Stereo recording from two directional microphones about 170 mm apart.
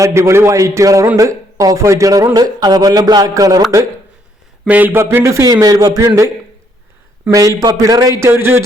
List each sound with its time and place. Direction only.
0.0 s a man's voice: 15° right (ahead or behind)
4.6 s speech: 10° right (ahead or behind)
7.3 s a man's voice: 20° right (ahead or behind)